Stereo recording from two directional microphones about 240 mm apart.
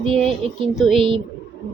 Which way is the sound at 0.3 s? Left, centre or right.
Right.